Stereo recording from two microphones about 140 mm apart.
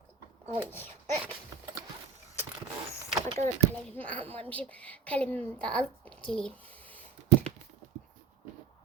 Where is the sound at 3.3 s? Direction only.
55° right (ahead or behind).